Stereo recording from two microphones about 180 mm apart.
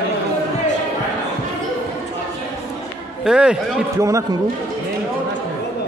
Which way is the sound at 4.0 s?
15° right (ahead or behind).